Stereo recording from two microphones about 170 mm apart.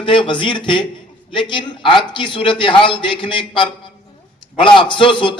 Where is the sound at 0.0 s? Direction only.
30° left (ahead or behind).